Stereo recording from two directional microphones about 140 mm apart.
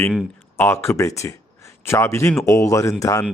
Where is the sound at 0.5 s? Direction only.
15° left (ahead or behind).